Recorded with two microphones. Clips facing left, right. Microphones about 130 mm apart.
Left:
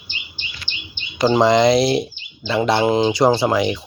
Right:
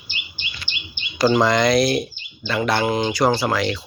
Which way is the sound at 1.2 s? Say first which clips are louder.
Left 3 dB; 25° left (ahead or behind).